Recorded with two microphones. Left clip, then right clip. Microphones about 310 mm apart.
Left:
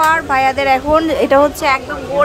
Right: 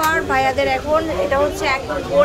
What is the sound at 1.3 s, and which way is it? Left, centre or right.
Speech, left.